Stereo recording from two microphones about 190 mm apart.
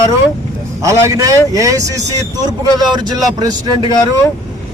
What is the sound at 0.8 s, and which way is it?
Speech, 15° right (ahead or behind).